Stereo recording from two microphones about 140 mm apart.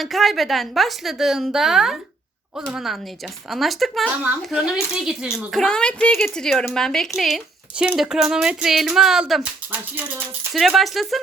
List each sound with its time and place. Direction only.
0.0 s speech: centre (ahead or behind)